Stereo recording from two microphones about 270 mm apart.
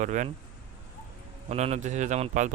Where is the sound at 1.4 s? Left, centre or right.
Right.